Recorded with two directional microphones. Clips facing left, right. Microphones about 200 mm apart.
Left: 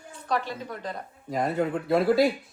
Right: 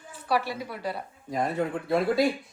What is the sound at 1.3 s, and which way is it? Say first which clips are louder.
Speech: left 2 dB; centre (ahead or behind).